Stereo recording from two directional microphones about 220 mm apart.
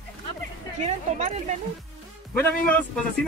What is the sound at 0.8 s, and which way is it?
Speech, 30° right (ahead or behind).